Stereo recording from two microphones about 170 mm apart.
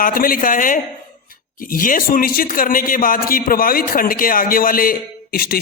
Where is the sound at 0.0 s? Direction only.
55° left (ahead or behind).